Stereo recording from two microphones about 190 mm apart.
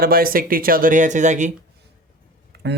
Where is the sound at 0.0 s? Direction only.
50° right (ahead or behind).